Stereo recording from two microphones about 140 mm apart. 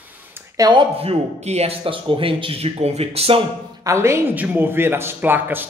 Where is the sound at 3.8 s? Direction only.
20° right (ahead or behind).